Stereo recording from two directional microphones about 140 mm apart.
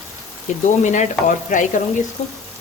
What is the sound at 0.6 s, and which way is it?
Speech, 60° left (ahead or behind).